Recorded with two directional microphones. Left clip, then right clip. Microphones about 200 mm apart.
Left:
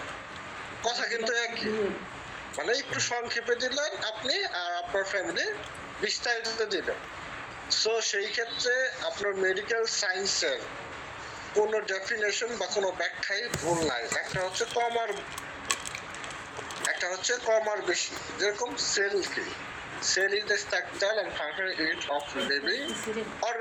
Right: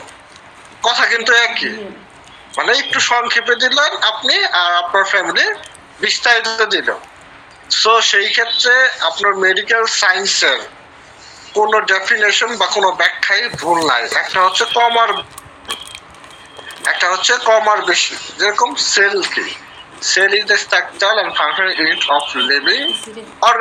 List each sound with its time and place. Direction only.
0.8 s a man's voice: 5° right (ahead or behind)
11.7 s a man's voice: 5° right (ahead or behind)
16.8 s a man's voice: 5° right (ahead or behind)